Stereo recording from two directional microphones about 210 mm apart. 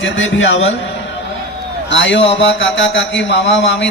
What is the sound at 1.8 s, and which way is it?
Speech, 60° left (ahead or behind).